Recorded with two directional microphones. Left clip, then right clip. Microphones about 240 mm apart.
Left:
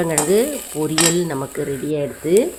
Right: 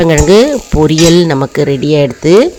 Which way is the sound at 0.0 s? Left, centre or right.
Right.